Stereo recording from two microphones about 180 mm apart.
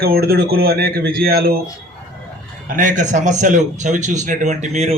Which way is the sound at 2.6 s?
45° right (ahead or behind).